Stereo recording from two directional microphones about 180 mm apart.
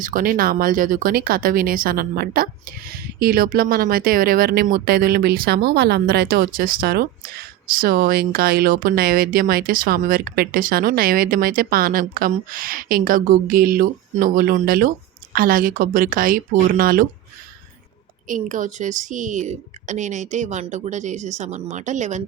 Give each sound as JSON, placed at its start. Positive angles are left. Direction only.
{"t": 0.0, "sound": "speech", "side_deg": -50}
{"t": 18.3, "sound": "a woman's voice", "side_deg": -45}